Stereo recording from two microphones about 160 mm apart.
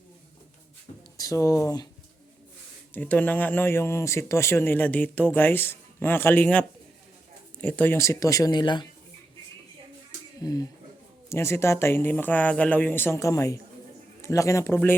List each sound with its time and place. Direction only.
1.1 s speech: 20° left (ahead or behind)
2.9 s speech: 10° left (ahead or behind); by 8.9 s 30° left (ahead or behind)
10.4 s speech: 25° left (ahead or behind)